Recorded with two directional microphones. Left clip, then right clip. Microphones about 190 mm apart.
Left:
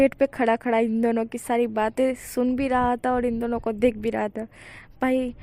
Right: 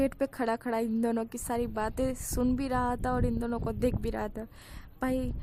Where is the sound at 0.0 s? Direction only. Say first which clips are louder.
Left 10 dB; 15° left (ahead or behind).